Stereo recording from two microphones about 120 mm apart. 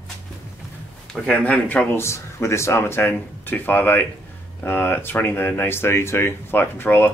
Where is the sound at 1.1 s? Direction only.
10° left (ahead or behind).